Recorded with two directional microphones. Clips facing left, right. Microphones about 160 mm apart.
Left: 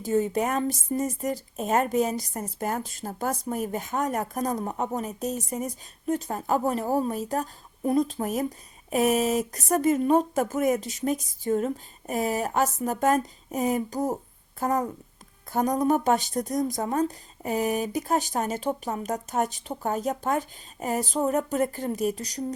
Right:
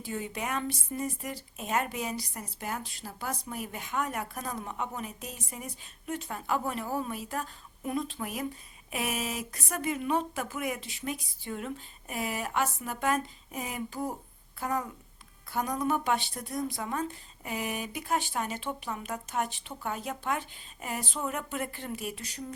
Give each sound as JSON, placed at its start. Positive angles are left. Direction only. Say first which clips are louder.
{"t": 0.0, "sound": "speech", "louder": "left 11 dB", "side_deg": 40}